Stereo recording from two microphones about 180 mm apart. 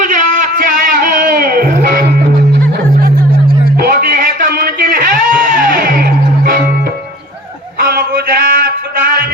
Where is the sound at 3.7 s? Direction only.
50° right (ahead or behind).